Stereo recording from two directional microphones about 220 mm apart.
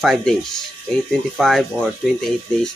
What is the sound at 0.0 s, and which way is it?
Speech, centre (ahead or behind).